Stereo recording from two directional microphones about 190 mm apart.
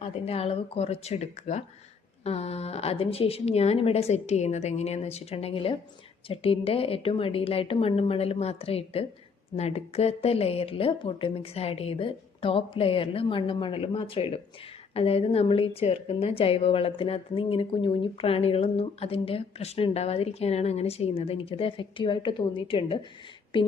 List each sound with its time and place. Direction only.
0.0 s a woman's voice: 30° left (ahead or behind)